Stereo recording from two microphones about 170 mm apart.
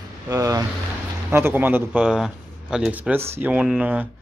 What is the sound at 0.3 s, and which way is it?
Speech, 20° right (ahead or behind).